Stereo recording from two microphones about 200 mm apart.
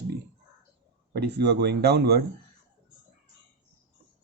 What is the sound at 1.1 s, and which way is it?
Speech, 55° right (ahead or behind).